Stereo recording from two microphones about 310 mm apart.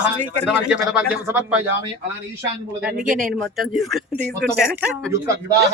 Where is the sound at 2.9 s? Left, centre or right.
Right.